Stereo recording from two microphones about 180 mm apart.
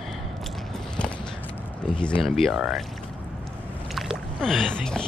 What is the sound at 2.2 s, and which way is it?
Speech, centre (ahead or behind).